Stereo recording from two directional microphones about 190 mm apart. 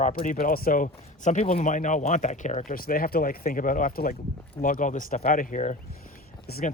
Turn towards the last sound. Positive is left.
turn(degrees=50)  # may be behind; listen again after turning